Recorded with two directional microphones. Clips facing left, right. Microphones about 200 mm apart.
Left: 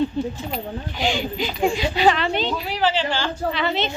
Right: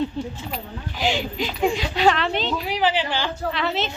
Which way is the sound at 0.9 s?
Centre (ahead or behind).